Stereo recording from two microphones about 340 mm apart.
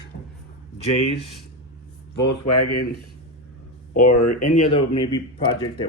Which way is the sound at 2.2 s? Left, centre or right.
Left.